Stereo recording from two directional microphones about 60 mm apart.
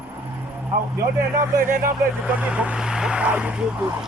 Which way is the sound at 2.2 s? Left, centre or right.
Centre.